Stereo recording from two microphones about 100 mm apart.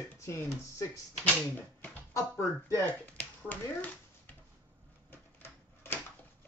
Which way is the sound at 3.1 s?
15° left (ahead or behind).